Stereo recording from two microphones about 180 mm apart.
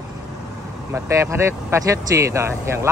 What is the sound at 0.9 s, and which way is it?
Speech, 15° right (ahead or behind).